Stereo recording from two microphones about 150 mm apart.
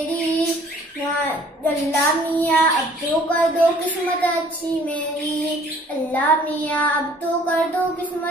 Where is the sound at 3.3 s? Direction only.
10° left (ahead or behind).